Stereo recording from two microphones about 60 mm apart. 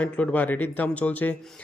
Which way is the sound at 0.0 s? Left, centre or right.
Left.